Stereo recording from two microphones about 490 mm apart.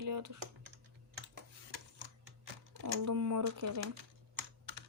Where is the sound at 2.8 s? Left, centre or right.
Right.